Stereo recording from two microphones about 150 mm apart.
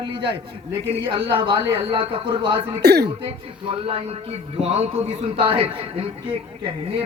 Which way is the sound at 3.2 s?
35° right (ahead or behind).